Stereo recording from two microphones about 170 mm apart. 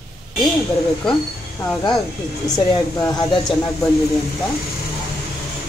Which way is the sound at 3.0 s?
25° left (ahead or behind).